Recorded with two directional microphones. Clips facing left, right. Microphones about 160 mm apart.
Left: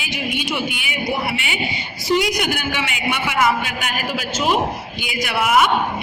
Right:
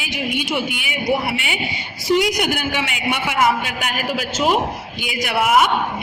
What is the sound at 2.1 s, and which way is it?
A man's voice, 50° right (ahead or behind).